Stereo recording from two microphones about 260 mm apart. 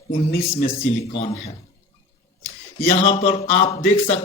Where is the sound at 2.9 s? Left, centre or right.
Left.